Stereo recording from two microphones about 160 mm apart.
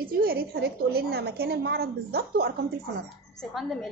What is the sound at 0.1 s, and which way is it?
A woman's voice, 70° right (ahead or behind).